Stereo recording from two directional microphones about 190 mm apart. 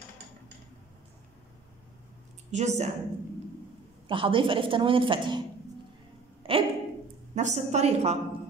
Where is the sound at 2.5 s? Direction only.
40° right (ahead or behind).